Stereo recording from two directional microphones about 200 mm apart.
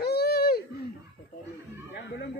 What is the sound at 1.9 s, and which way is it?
Chatter, 60° left (ahead or behind).